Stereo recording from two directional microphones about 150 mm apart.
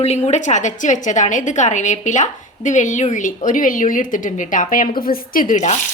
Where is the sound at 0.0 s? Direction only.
45° left (ahead or behind).